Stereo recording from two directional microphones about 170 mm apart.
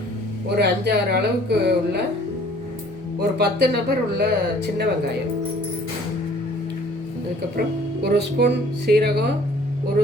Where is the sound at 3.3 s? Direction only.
70° right (ahead or behind).